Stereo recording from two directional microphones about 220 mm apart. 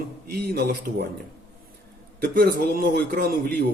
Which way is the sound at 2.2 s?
45° right (ahead or behind).